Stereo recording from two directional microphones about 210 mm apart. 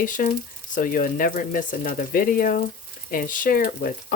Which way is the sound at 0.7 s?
40° left (ahead or behind).